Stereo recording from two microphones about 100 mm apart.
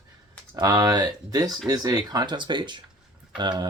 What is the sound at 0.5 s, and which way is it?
Speech, 40° right (ahead or behind).